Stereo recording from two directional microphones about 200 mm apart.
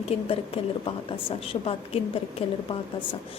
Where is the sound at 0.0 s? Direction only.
30° left (ahead or behind).